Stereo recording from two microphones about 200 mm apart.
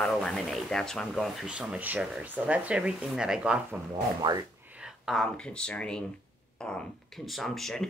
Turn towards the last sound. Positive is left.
turn(degrees=0)  # may be behind; listen again after turning